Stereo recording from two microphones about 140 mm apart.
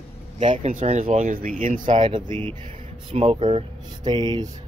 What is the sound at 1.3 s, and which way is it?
Speech, 80° right.